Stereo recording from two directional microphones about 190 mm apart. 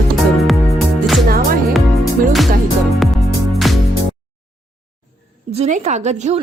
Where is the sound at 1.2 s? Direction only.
50° right (ahead or behind).